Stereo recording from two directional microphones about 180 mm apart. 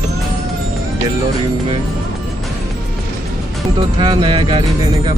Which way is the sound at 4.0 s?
25° right (ahead or behind).